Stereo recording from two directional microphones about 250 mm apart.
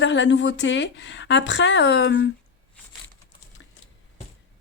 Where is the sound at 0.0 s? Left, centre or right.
Left.